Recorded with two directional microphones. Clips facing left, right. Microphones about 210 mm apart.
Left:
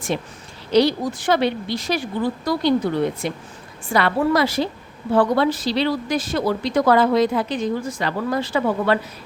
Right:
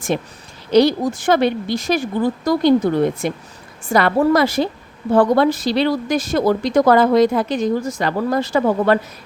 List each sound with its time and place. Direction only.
0.1 s a woman's voice: 50° right (ahead or behind)